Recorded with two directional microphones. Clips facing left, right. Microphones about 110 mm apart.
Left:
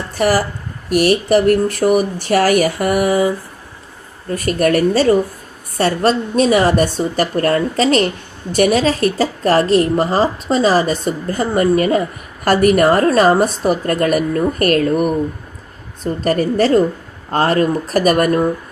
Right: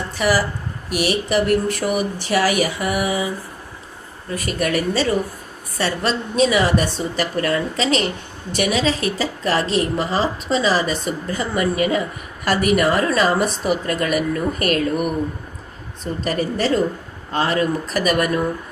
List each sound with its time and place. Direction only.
0.2 s a woman's voice: 45° left (ahead or behind)
16.2 s a woman's voice: 45° left (ahead or behind)